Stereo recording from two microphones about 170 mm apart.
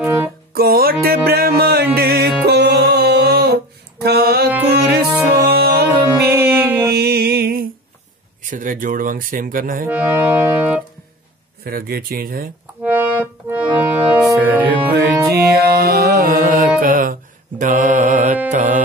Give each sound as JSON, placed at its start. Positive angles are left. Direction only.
{"t": 0.5, "sound": "music", "side_deg": -65}
{"t": 6.3, "sound": "music", "side_deg": -15}
{"t": 6.9, "sound": "music", "side_deg": -70}
{"t": 8.5, "sound": "speech", "side_deg": -50}
{"t": 9.8, "sound": "music", "side_deg": -10}
{"t": 11.6, "sound": "speech", "side_deg": -60}
{"t": 12.8, "sound": "accordion", "side_deg": -10}
{"t": 14.2, "sound": "music", "side_deg": -10}
{"t": 15.4, "sound": "mantra", "side_deg": -70}
{"t": 18.5, "sound": "music", "side_deg": -50}